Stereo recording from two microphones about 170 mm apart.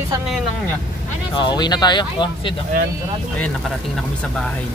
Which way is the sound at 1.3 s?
25° left (ahead or behind).